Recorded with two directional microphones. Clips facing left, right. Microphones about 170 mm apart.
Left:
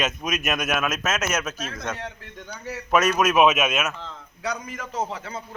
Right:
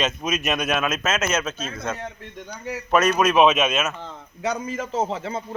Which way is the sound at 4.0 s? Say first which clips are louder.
Right 4 dB; 25° right (ahead or behind).